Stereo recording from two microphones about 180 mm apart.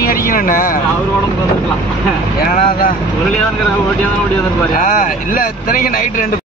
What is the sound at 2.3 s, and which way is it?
Speech, 50° left (ahead or behind).